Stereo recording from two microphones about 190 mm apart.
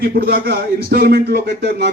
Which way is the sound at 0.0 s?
50° right (ahead or behind).